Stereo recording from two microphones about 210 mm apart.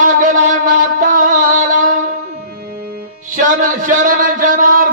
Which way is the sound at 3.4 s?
40° right (ahead or behind).